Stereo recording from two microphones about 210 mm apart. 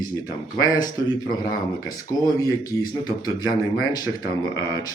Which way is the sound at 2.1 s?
20° left (ahead or behind).